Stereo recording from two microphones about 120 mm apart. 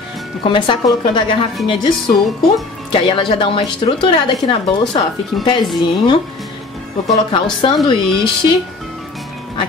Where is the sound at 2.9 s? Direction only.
45° left (ahead or behind).